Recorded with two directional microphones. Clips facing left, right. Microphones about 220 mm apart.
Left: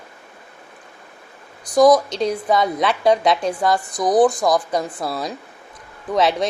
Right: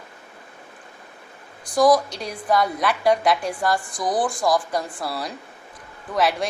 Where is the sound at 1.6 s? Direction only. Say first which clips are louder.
Left 4 dB; 20° left (ahead or behind).